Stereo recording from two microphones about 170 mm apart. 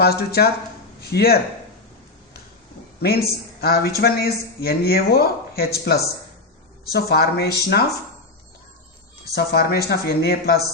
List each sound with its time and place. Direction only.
0.0 s a man's voice: 65° left (ahead or behind)
3.0 s speech: 65° left (ahead or behind)
9.3 s speech: 70° left (ahead or behind)